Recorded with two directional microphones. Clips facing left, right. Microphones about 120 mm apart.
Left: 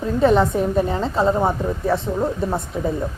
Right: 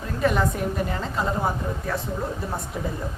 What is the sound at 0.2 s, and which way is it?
A woman's voice, 30° left (ahead or behind).